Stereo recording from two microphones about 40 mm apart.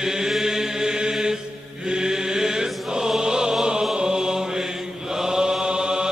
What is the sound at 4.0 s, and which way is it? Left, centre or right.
Mantra, centre.